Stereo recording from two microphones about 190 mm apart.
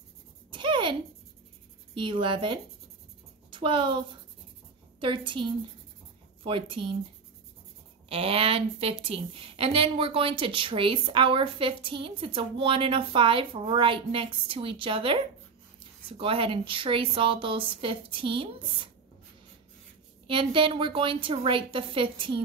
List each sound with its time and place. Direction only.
0.5 s a sound: 25° right (ahead or behind)
2.0 s a woman's voice: 25° right (ahead or behind)
5.0 s a woman's voice: 25° right (ahead or behind)
8.1 s a woman's voice: 30° right (ahead or behind)
20.2 s a woman's voice: 25° right (ahead or behind)